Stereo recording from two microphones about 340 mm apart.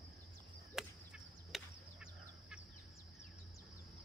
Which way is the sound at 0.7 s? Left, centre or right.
Centre.